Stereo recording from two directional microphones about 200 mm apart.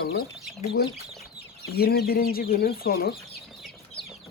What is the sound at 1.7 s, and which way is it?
Speech, 50° left (ahead or behind).